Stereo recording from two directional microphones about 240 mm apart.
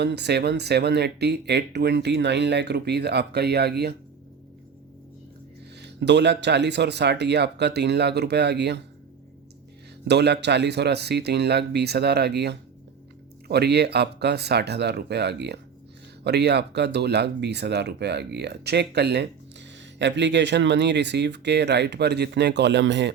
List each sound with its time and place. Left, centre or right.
0.0 s speech: right
5.7 s speech: right
10.1 s speech: right